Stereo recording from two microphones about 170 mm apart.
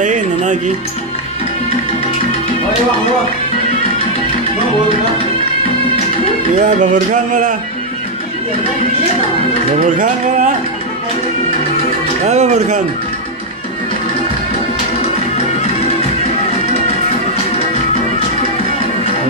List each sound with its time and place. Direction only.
0.0 s music: 45° right (ahead or behind)
6.6 s music: 50° right (ahead or behind)
9.8 s music: 50° right (ahead or behind)
12.3 s a man's voice: 40° right (ahead or behind)